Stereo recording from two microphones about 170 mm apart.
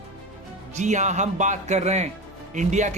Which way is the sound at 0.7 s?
45° right (ahead or behind).